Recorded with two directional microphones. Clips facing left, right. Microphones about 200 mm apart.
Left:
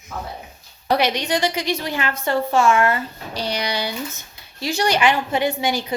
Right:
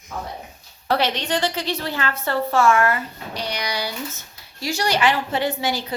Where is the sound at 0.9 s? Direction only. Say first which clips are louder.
Left 2 dB; 15° left (ahead or behind).